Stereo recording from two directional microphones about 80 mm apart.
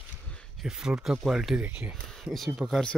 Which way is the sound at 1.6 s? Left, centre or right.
Centre.